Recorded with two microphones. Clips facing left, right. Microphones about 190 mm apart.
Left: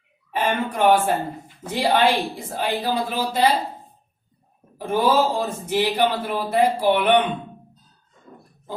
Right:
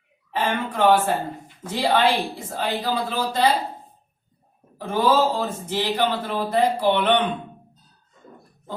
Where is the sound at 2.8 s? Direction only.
10° left (ahead or behind).